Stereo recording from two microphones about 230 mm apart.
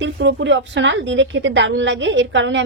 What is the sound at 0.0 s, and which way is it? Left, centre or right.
A woman's voice, right.